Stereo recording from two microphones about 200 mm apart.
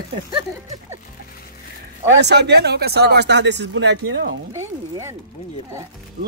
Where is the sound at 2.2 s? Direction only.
55° right (ahead or behind).